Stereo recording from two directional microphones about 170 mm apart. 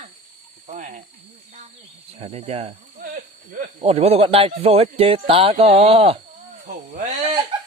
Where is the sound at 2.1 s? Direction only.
35° right (ahead or behind).